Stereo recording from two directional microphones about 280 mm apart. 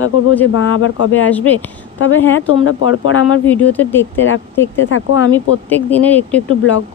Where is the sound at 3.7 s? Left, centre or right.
Centre.